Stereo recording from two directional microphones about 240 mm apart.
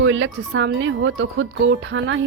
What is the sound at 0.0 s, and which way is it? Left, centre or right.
A woman's voice, right.